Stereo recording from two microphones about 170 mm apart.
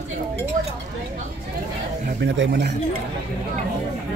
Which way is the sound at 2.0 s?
80° right.